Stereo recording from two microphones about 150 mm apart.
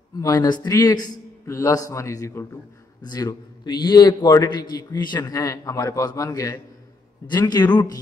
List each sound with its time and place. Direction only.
0.1 s a man's voice: 25° left (ahead or behind)